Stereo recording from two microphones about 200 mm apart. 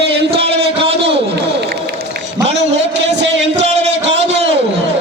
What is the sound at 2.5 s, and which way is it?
A man's voice, 60° right (ahead or behind).